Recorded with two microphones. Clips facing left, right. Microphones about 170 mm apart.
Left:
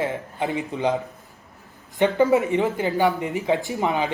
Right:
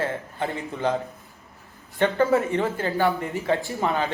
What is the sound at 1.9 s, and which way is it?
Speech, 15° left (ahead or behind).